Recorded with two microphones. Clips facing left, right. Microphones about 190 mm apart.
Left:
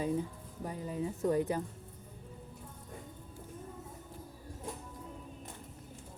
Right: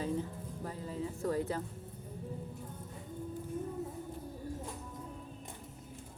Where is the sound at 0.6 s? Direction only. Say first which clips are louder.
Left 3 dB; 15° left (ahead or behind).